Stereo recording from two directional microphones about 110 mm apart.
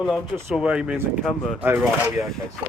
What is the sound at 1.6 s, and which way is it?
Speech, 15° right (ahead or behind).